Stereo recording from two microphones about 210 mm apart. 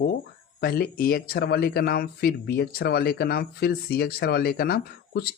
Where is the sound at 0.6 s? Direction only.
45° left (ahead or behind).